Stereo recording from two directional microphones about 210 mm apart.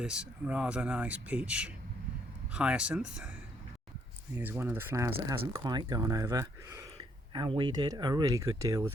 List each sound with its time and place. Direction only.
0.0 s speech: 5° right (ahead or behind)
4.4 s speech: 10° right (ahead or behind)
7.3 s speech: 25° right (ahead or behind)